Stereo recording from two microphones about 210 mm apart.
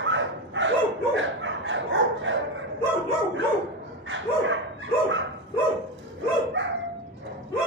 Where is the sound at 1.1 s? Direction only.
60° right (ahead or behind).